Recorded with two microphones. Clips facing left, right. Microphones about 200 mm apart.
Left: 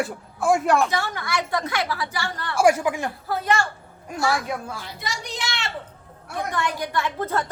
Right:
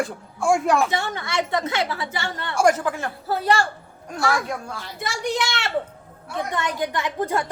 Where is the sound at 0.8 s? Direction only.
25° right (ahead or behind).